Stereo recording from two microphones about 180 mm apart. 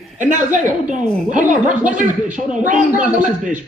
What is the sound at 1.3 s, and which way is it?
Speech, 45° right (ahead or behind).